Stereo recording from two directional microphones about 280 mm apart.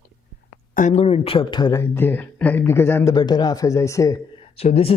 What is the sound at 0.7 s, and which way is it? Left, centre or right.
Speech, left.